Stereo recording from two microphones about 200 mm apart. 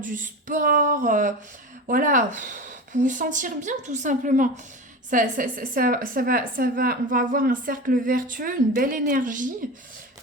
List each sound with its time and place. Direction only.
0.0 s a woman's voice: 40° right (ahead or behind)